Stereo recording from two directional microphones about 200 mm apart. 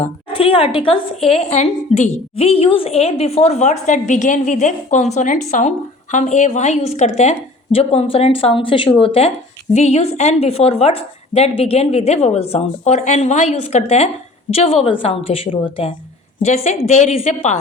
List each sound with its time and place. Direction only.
0.0 s a woman's voice: 30° left (ahead or behind)